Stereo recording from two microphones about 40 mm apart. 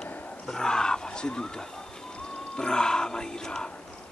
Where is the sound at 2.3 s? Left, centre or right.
Centre.